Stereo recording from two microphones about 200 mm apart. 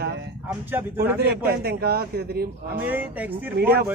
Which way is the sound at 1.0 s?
55° right (ahead or behind).